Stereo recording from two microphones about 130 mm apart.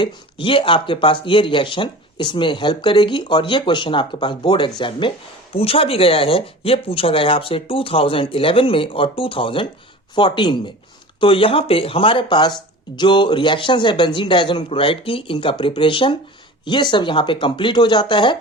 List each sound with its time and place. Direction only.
0.0 s speech: 40° left (ahead or behind)